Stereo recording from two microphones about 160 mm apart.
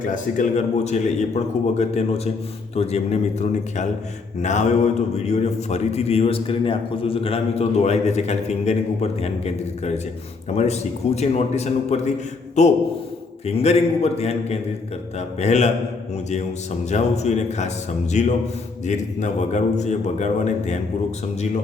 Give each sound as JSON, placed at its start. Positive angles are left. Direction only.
{"t": 0.0, "sound": "a man's voice", "side_deg": 55}
{"t": 10.5, "sound": "a man's voice", "side_deg": 45}
{"t": 16.9, "sound": "a man's voice", "side_deg": 45}